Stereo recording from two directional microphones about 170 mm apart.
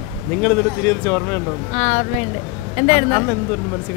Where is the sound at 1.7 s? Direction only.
40° left (ahead or behind).